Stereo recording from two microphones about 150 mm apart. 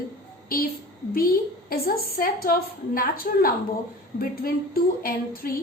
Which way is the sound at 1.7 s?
85° left.